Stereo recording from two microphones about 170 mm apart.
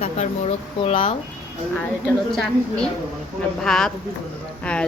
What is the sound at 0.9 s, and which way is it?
Speech, 35° left (ahead or behind).